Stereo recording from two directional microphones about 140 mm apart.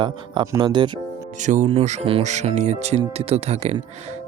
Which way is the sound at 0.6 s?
35° right (ahead or behind).